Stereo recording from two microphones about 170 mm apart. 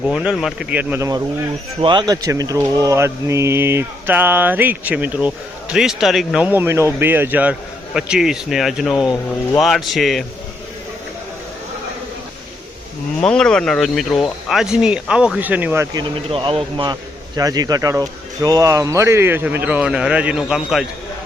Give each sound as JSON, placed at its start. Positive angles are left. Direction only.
{"t": 0.0, "sound": "speech", "side_deg": -5}
{"t": 13.2, "sound": "speech", "side_deg": 5}
{"t": 16.3, "sound": "speech", "side_deg": -30}